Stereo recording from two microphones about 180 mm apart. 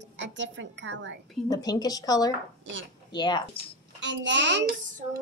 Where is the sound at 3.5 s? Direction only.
90° right.